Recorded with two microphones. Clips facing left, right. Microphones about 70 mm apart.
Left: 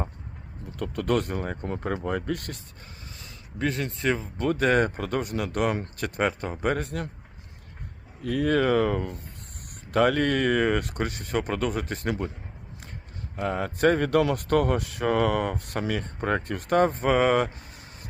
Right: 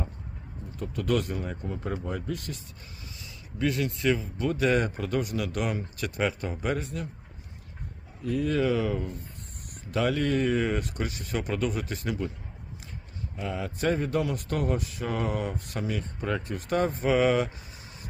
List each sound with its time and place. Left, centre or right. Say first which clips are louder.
0.8 s speech: left 2 dB; left
3.2 s speech: even; left
8.2 s speech: left 3 dB; left
13.3 s speech: left 5 dB; left